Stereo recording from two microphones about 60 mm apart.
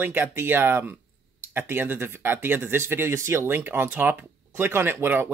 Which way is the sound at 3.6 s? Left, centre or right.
Right.